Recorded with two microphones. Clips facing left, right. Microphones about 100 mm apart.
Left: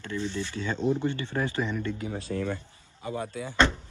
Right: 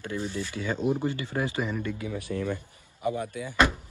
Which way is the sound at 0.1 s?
40° right (ahead or behind).